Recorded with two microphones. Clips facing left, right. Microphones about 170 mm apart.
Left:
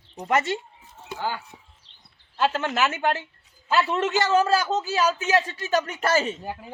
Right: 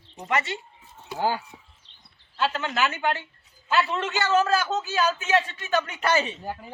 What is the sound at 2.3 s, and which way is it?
Speech, 45° left (ahead or behind).